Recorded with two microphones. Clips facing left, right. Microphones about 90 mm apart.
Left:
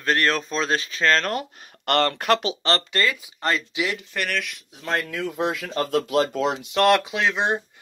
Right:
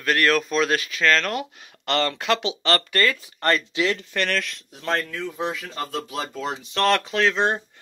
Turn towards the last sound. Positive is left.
turn(degrees=15)  # may be behind; listen again after turning